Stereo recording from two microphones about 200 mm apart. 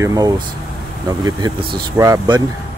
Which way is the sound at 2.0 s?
20° right (ahead or behind).